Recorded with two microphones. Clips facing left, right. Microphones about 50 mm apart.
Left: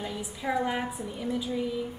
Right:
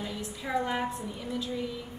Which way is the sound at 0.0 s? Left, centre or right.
Centre.